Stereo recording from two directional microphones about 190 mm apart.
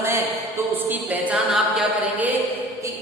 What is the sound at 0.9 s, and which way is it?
A capella, 10° right (ahead or behind).